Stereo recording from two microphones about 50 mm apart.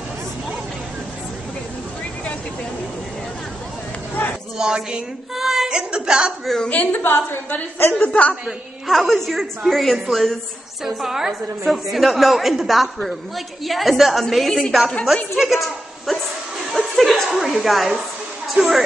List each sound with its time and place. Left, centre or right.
4.2 s a sound: left
4.6 s speech: centre
5.3 s a sound: centre
5.7 s a woman's voice: centre
6.4 s a woman's voice: centre
6.7 s a woman's voice: left
7.9 s a woman's voice: left
8.5 s a woman's voice: centre
10.8 s a woman's voice: centre